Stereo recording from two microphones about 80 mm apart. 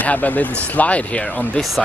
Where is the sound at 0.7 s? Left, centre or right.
Centre.